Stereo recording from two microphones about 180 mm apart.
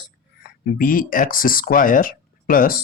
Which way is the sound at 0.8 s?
50° left (ahead or behind).